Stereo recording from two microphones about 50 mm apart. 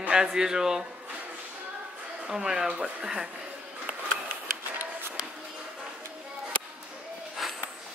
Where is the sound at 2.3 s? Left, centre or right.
Centre.